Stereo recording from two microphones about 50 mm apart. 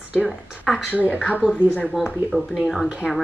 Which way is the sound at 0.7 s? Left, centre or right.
Centre.